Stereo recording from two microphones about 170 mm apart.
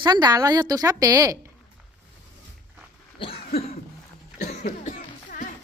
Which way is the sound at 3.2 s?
35° left (ahead or behind).